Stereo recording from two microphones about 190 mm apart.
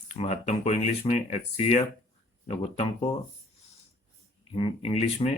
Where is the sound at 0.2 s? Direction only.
35° left (ahead or behind).